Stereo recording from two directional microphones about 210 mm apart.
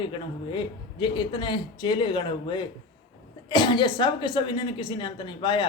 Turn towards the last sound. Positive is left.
turn(degrees=20)  # may be behind; listen again after turning